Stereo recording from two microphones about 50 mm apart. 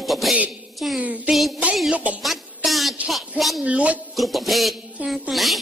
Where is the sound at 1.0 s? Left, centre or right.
Right.